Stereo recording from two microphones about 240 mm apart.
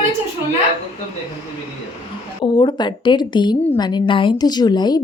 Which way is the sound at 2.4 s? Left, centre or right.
Left.